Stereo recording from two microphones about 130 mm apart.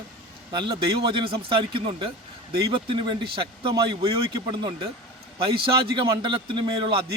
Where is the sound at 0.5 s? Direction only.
40° right (ahead or behind).